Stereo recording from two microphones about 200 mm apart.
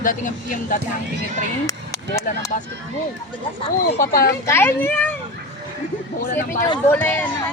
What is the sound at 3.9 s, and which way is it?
Speech, 45° left (ahead or behind).